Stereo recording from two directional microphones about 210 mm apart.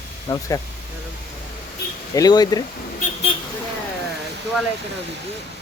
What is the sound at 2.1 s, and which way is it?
Speech, 20° left (ahead or behind).